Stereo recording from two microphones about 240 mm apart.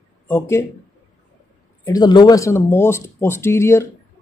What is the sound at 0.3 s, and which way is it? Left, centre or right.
Speech, centre.